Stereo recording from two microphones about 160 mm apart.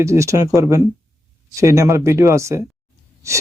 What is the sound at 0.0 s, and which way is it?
A man's voice, 20° right (ahead or behind).